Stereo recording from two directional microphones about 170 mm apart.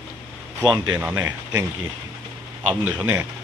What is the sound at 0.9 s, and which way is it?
Speech, 10° right (ahead or behind).